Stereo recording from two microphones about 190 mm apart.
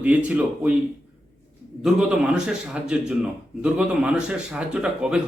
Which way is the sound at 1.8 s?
5° right (ahead or behind).